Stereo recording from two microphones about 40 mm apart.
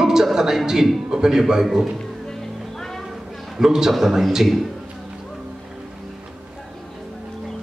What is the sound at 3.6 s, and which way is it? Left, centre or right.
A man's voice, centre.